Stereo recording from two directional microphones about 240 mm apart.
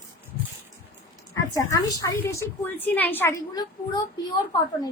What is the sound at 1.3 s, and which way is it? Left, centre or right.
A woman's voice, centre.